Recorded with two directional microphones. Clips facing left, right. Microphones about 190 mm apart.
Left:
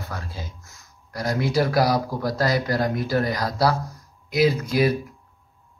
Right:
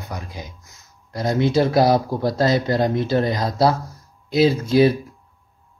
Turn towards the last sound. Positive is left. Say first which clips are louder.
# right 5 dB
turn(degrees=-30)  # may be behind; listen again after turning